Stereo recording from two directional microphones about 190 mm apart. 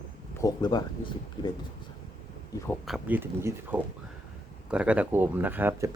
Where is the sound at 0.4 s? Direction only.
20° left (ahead or behind).